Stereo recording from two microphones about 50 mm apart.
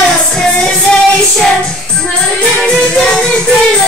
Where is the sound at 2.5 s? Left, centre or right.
Centre.